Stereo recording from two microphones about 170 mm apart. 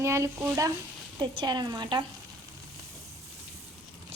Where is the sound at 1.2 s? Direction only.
25° right (ahead or behind).